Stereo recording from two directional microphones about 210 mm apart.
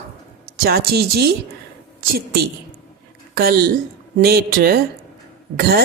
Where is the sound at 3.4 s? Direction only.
45° right (ahead or behind).